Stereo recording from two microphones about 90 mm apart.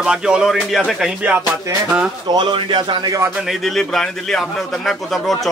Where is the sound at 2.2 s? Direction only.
55° right (ahead or behind).